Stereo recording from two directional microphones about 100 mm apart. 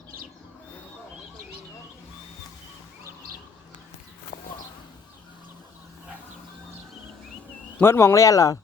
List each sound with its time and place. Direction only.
7.8 s speech: 25° left (ahead or behind)